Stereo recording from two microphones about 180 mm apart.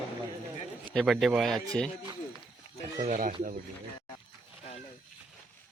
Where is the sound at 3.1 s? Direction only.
45° right (ahead or behind).